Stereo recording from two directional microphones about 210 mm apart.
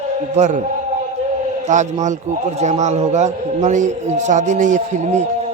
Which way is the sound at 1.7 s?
35° right (ahead or behind).